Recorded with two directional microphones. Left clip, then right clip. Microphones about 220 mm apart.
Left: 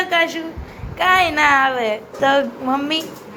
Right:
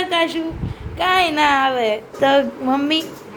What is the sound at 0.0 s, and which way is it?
A woman's voice, 20° right (ahead or behind).